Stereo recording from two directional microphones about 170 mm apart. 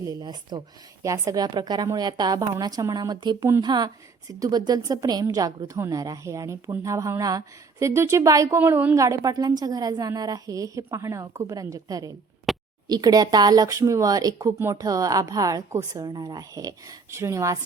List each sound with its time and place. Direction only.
0.0 s a woman's voice: 25° right (ahead or behind)
9.0 s a woman's voice: 20° right (ahead or behind)
12.5 s a sound: centre (ahead or behind)
12.9 s a woman's voice: 25° right (ahead or behind)